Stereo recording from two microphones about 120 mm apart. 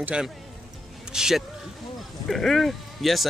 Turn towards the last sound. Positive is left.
turn(degrees=0)  # may be behind; listen again after turning